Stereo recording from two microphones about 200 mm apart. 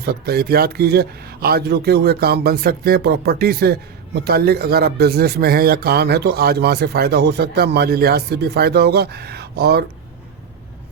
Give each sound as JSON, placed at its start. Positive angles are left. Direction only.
{"t": 0.0, "sound": "a man's voice", "side_deg": -50}